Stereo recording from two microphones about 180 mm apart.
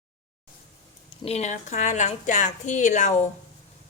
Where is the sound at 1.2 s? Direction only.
35° left (ahead or behind).